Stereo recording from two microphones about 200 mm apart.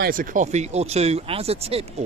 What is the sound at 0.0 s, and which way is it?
Speech, 40° right (ahead or behind).